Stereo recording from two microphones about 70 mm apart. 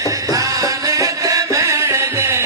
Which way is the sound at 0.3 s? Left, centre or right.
Right.